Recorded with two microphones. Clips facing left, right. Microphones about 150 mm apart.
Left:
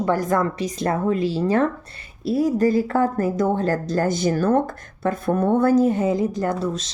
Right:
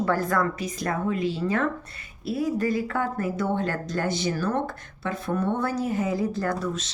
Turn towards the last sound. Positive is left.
turn(degrees=30)  # may be behind; listen again after turning